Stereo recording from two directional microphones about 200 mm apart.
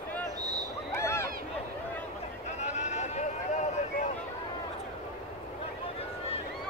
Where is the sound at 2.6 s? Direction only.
35° left (ahead or behind).